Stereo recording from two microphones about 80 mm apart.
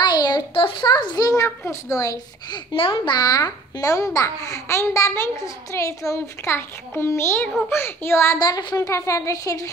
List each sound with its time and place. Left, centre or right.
0.0 s a child's voice: left
2.5 s a child's voice: left
8.4 s a child's voice: left